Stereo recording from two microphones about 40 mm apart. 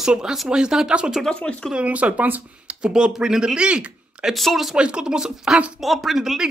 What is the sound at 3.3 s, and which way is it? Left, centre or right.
Speech, centre.